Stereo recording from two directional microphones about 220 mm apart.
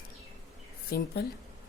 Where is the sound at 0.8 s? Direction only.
45° left (ahead or behind).